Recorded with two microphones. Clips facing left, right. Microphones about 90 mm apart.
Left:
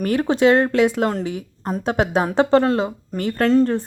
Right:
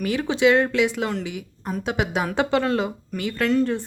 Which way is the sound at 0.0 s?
45° left (ahead or behind).